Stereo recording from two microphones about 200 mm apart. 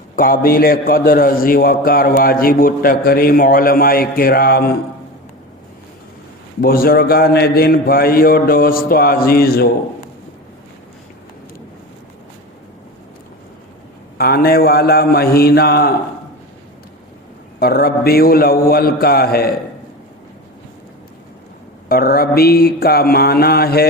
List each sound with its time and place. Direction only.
0.2 s a man's voice: 45° left (ahead or behind)
6.6 s a man's voice: 50° left (ahead or behind)
14.2 s a man's voice: 50° left (ahead or behind)
17.6 s a man's voice: 50° left (ahead or behind)
21.8 s a man's voice: 50° left (ahead or behind)